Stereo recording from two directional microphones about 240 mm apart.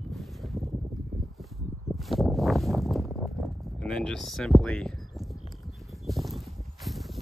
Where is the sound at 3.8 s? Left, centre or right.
Centre.